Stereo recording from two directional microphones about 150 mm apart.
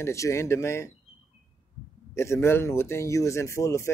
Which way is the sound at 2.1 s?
20° left (ahead or behind).